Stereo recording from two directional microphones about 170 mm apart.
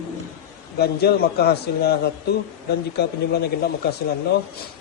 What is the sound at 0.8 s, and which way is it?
A man's voice, 70° left (ahead or behind).